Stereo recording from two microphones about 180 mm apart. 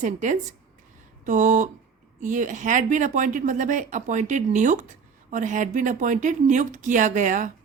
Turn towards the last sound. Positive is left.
turn(degrees=-45)  # may be behind; listen again after turning